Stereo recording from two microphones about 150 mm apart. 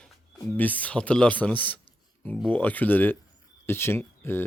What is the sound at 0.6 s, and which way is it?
Speech, 10° left (ahead or behind).